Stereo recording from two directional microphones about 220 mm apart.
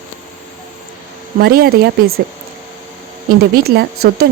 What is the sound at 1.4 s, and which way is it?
Speech, 45° right (ahead or behind).